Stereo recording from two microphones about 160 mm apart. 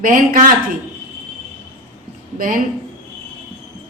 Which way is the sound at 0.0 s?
60° right (ahead or behind).